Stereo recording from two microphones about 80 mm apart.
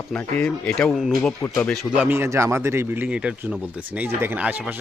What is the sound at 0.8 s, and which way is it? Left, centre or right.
Speech, centre.